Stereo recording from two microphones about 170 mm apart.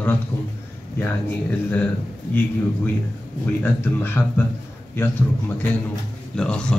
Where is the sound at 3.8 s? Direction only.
15° left (ahead or behind).